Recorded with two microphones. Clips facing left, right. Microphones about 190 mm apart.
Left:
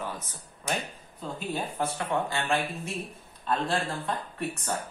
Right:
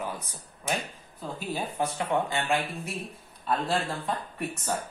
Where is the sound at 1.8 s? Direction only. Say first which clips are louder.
Right 2 dB; 15° right (ahead or behind).